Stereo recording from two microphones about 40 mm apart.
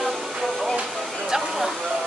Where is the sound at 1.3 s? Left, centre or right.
Centre.